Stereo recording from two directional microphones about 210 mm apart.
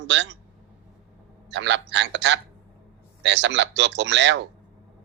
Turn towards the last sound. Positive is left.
turn(degrees=-60)  # may be behind; listen again after turning